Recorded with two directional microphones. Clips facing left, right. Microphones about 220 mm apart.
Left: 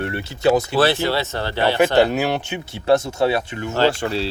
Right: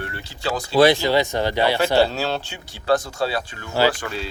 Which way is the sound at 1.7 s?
15° left (ahead or behind).